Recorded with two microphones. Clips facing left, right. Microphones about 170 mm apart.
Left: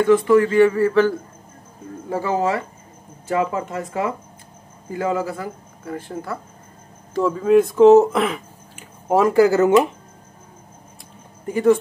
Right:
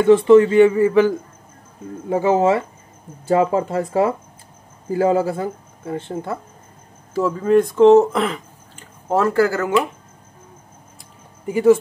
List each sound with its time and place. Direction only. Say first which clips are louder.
0.0 s speech: right 4 dB; 25° right (ahead or behind)
7.2 s speech: even; centre (ahead or behind)
9.1 s speech: left 3 dB; 15° left (ahead or behind)
11.4 s speech: right 2 dB; 5° right (ahead or behind)